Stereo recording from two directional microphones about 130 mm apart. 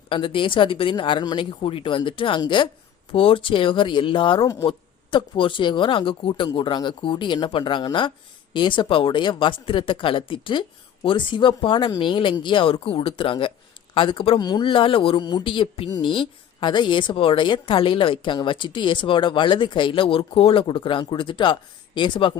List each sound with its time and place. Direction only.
0.1 s a woman's voice: 40° left (ahead or behind)